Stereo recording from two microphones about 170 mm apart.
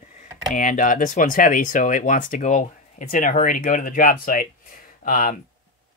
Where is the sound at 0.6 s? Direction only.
50° left (ahead or behind).